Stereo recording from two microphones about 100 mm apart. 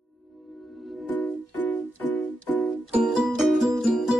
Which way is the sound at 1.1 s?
15° left (ahead or behind).